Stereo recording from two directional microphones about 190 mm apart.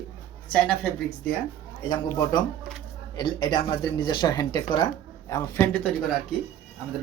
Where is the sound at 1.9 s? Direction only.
20° left (ahead or behind).